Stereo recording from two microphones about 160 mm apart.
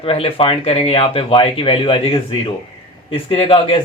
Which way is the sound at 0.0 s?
35° left (ahead or behind).